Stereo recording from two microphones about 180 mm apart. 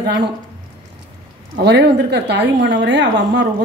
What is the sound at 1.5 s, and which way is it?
A woman's voice, 70° right (ahead or behind).